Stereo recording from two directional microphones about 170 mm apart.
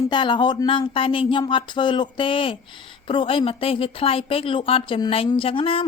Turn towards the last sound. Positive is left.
turn(degrees=30)  # may be behind; listen again after turning